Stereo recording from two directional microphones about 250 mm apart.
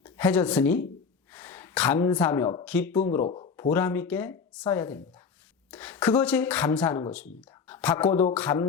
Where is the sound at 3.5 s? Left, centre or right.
Centre.